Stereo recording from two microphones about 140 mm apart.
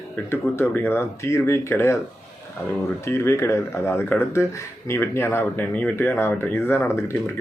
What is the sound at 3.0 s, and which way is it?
Speech, 20° left (ahead or behind).